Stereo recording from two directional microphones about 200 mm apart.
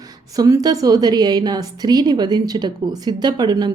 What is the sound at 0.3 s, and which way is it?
A woman's voice, 20° right (ahead or behind).